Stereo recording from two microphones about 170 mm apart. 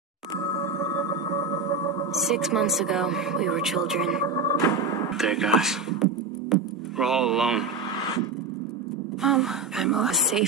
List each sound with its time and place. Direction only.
2.1 s speech: centre (ahead or behind)
4.6 s hammer: 20° left (ahead or behind)
5.1 s speech: centre (ahead or behind)
6.5 s music: centre (ahead or behind)
9.2 s speech: centre (ahead or behind)